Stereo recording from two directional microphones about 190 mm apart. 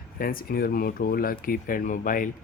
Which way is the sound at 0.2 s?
50° left (ahead or behind).